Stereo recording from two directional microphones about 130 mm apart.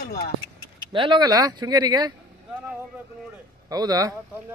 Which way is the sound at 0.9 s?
40° right (ahead or behind).